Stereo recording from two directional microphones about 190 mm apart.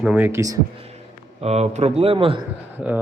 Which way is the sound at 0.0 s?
10° right (ahead or behind).